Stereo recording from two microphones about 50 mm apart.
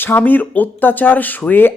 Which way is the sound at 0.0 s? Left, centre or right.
Left.